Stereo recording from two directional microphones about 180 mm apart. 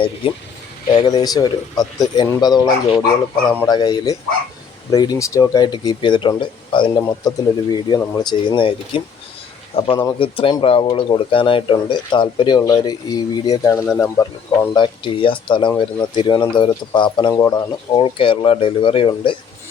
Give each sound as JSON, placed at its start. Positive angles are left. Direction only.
{"t": 0.9, "sound": "speech", "side_deg": 25}
{"t": 3.7, "sound": "speech", "side_deg": 25}